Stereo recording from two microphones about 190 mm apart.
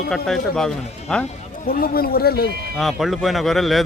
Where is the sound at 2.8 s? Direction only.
Centre (ahead or behind).